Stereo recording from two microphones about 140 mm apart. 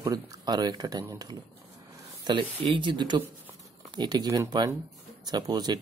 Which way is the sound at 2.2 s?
35° right (ahead or behind).